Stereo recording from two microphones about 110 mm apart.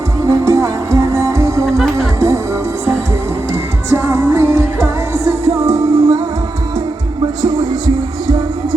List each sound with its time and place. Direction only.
0.3 s music: 25° right (ahead or behind)
1.6 s music: centre (ahead or behind)
2.1 s music: 30° right (ahead or behind)
3.8 s music: 25° right (ahead or behind)